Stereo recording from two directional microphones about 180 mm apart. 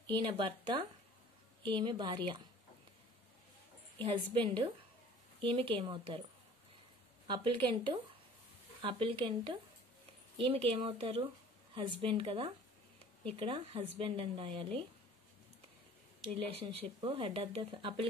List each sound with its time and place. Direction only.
0.0 s speech: 25° right (ahead or behind)
4.0 s speech: 30° right (ahead or behind)
7.2 s speech: 25° right (ahead or behind)
16.2 s speech: 35° right (ahead or behind)